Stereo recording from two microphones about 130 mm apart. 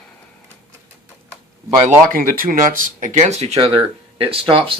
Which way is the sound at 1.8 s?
90° right.